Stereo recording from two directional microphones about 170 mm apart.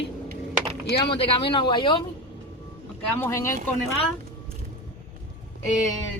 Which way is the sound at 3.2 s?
15° left (ahead or behind).